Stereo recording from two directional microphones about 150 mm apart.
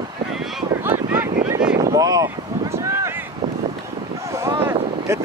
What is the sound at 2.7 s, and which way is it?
Boat, 20° right (ahead or behind).